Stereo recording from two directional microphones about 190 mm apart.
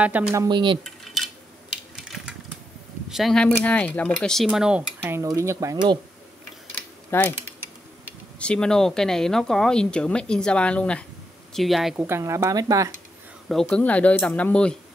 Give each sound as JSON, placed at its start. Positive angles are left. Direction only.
{"t": 0.0, "sound": "speech", "side_deg": -5}
{"t": 0.5, "sound": "speech", "side_deg": -25}
{"t": 0.8, "sound": "a sound", "side_deg": 0}
{"t": 3.1, "sound": "speech", "side_deg": 0}
{"t": 6.7, "sound": "mechanisms", "side_deg": 10}
{"t": 8.4, "sound": "speech", "side_deg": 5}
{"t": 12.0, "sound": "speech", "side_deg": -15}
{"t": 13.5, "sound": "speech", "side_deg": 5}